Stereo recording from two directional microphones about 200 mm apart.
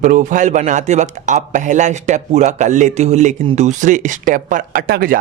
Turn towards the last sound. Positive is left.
turn(degrees=-45)  # may be behind; listen again after turning